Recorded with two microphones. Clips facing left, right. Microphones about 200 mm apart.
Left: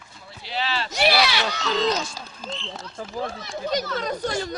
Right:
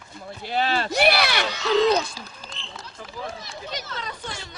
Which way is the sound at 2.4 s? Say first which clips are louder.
Left 6 dB; 45° left (ahead or behind).